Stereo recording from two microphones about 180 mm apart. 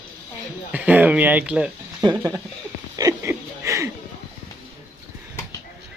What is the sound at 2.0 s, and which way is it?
Speech, 20° right (ahead or behind).